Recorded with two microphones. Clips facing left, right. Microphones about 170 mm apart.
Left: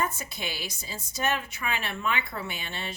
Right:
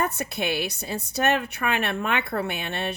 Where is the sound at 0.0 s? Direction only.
65° right (ahead or behind).